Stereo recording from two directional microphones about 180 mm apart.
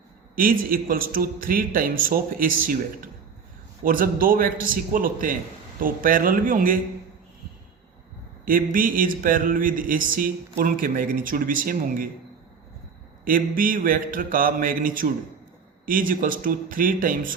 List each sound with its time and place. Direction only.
0.3 s a man's voice: 50° right (ahead or behind)
8.4 s a man's voice: 50° right (ahead or behind)
13.6 s a man's voice: 50° right (ahead or behind)